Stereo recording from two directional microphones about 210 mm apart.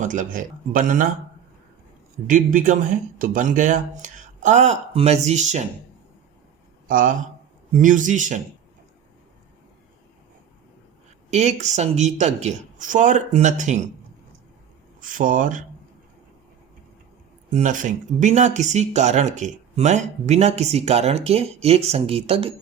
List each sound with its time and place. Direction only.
0.0 s speech: 35° right (ahead or behind)
2.2 s speech: 40° right (ahead or behind)
6.8 s speech: 40° right (ahead or behind)
11.3 s speech: 30° right (ahead or behind)
15.0 s speech: 40° right (ahead or behind)
17.5 s speech: 35° right (ahead or behind)